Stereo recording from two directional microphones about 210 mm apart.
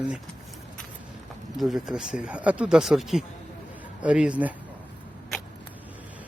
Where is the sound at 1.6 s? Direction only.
Centre (ahead or behind).